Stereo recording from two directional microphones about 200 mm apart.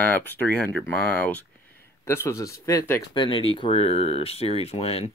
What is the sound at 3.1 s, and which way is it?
Speech, 25° left (ahead or behind).